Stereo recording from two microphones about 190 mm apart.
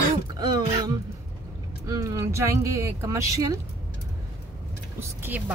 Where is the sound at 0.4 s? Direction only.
20° right (ahead or behind).